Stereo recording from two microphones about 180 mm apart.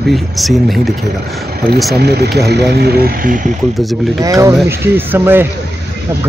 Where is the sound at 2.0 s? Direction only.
65° right (ahead or behind).